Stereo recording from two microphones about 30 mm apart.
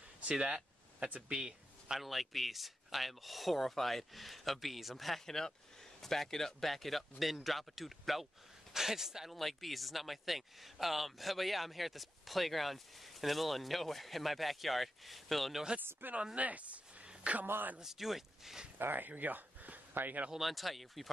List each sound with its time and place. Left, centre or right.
0.2 s speech: right
1.3 s speech: right
2.0 s speech: centre
5.2 s speech: centre
8.7 s speech: centre
9.3 s speech: centre
16.3 s speech: right
17.0 s a sound: right
17.3 s a man's voice: right
17.8 s speech: centre
18.9 s speech: right
20.3 s speech: centre